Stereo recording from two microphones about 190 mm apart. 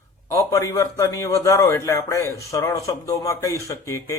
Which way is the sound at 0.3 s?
15° left (ahead or behind).